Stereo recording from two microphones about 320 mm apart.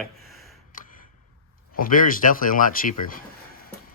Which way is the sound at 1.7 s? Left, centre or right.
Left.